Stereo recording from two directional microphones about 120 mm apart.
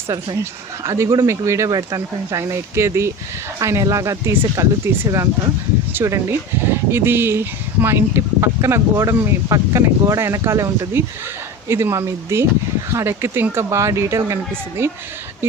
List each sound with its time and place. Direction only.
0.9 s speech: 25° right (ahead or behind)